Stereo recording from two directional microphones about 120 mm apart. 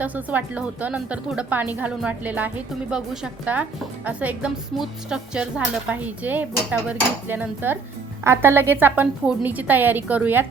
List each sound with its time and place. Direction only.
0.0 s speech: 15° right (ahead or behind)